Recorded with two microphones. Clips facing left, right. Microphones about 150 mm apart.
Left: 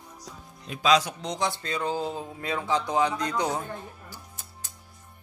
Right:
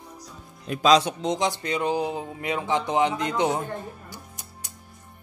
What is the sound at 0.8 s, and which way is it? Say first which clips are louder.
Speech: right 4 dB; 30° right (ahead or behind).